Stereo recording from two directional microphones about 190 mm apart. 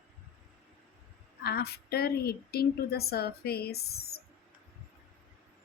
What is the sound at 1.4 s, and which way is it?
A woman's voice, 55° left (ahead or behind).